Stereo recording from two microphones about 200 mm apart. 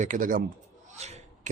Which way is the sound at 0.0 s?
40° right (ahead or behind).